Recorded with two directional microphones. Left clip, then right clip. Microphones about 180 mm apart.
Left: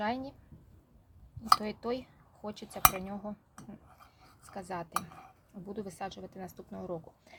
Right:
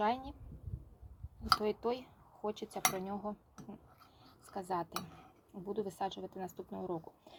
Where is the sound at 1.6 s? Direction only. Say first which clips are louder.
Right 1 dB; 5° left (ahead or behind).